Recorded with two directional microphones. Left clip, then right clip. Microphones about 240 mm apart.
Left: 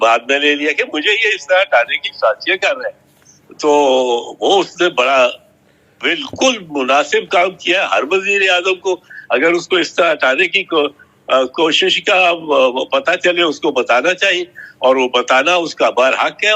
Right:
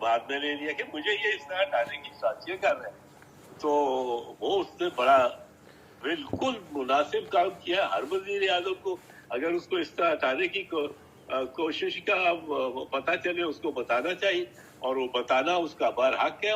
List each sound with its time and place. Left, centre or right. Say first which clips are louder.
0.0 s speech: left 15 dB; left